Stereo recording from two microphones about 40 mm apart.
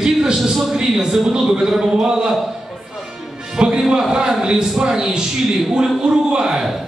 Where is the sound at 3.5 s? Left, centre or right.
Right.